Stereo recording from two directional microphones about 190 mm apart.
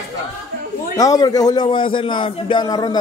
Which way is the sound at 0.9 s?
20° left (ahead or behind).